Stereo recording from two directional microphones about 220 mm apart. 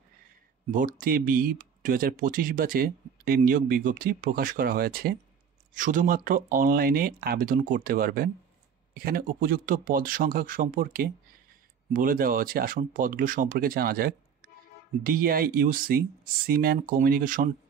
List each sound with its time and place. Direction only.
0.7 s speech: 40° right (ahead or behind)